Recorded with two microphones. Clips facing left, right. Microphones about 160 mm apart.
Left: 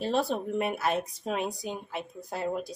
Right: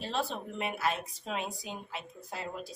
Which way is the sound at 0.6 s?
50° left (ahead or behind).